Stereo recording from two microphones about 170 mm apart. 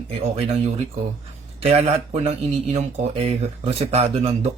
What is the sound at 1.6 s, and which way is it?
Speech, 40° right (ahead or behind).